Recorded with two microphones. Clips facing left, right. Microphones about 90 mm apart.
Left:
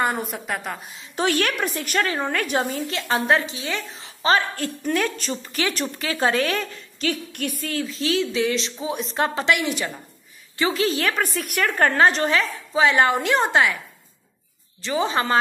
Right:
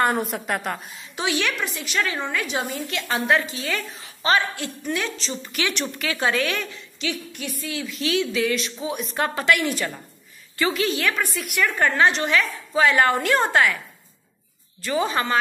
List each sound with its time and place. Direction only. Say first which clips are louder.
0.0 s a woman's voice: right 2 dB; centre (ahead or behind)
1.1 s a woman's voice: left 3 dB; 45° left (ahead or behind)
2.9 s a woman's voice: even; 30° left (ahead or behind); by 5.3 s 50° left (ahead or behind)
5.3 s a woman's voice: left 1 dB; 35° left (ahead or behind); by 7.8 s 55° left (ahead or behind)
7.8 s a woman's voice: even; 35° left (ahead or behind)
10.6 s a woman's voice: left 1 dB; 30° left (ahead or behind)
12.7 s a woman's voice: even; 20° left (ahead or behind)
14.8 s a woman's voice: left 1 dB; 25° left (ahead or behind)